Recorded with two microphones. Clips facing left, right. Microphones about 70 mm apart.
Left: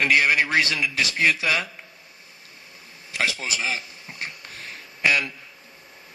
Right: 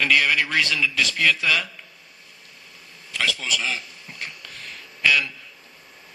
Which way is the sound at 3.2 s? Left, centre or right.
Left.